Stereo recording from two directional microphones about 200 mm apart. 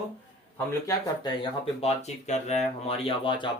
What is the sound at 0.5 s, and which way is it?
Speech, 20° left (ahead or behind).